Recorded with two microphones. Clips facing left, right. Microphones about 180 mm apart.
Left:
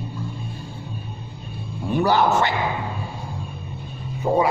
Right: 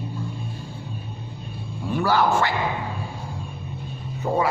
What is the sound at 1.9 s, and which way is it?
Speech, 20° left (ahead or behind).